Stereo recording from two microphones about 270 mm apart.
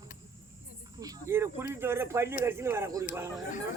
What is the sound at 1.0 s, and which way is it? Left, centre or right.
A man's voice, centre.